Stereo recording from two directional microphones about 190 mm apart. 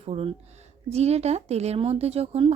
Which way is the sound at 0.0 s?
30° right (ahead or behind).